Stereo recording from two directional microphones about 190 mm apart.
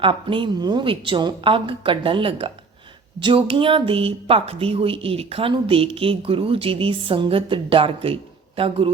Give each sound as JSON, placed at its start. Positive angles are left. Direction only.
{"t": 0.0, "sound": "a woman's voice", "side_deg": -25}